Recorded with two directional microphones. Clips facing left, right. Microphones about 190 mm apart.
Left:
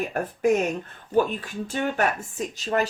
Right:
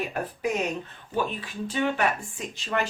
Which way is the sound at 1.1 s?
45° left (ahead or behind).